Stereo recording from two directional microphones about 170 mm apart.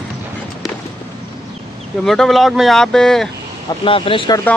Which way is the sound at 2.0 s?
Centre (ahead or behind).